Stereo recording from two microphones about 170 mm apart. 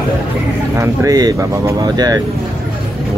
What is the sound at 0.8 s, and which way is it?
Speech, 20° right (ahead or behind).